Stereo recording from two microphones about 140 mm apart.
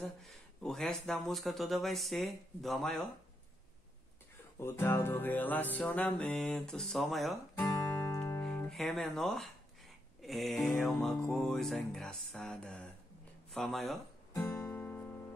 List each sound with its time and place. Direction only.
0.2 s speech: centre (ahead or behind)
4.6 s music: 15° left (ahead or behind); by 7.3 s centre (ahead or behind)
7.5 s music: 25° left (ahead or behind)
8.4 s speech: 10° left (ahead or behind)
14.3 s guitar: 15° left (ahead or behind)